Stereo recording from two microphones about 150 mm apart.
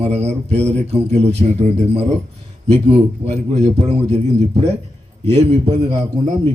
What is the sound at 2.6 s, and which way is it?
A man's voice, 45° right (ahead or behind).